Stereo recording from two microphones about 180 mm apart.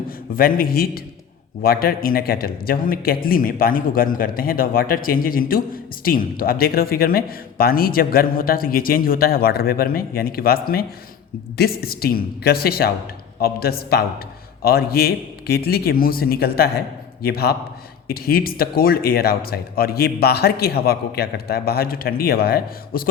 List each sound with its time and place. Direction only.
0.3 s speech: 55° left (ahead or behind)